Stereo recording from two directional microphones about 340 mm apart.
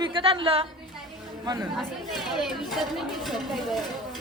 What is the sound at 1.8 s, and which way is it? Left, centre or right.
A woman's voice, centre.